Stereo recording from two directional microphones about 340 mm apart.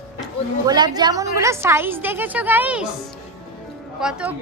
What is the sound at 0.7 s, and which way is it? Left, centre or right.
A woman's voice, centre.